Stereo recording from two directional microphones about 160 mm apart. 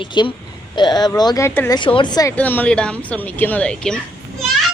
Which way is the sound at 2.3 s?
10° left (ahead or behind).